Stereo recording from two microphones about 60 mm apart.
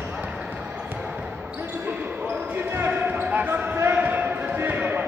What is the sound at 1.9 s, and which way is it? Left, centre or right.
Basketball bounce, right.